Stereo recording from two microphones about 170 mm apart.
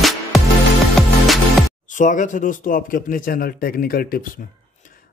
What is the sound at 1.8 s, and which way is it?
Speech, 50° left (ahead or behind).